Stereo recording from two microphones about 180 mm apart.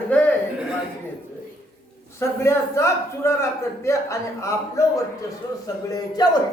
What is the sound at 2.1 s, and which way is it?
A man's voice, 15° left (ahead or behind).